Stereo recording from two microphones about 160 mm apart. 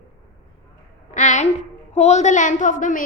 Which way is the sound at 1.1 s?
50° left (ahead or behind).